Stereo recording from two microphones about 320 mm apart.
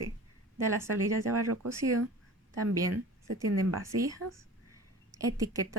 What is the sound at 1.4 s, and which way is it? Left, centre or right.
Speech, right.